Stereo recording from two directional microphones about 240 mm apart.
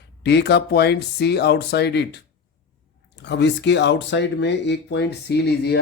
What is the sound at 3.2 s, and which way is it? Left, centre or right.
A man's voice, left.